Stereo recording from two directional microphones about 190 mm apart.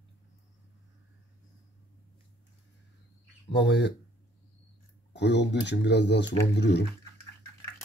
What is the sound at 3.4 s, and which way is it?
Speech, 65° left (ahead or behind).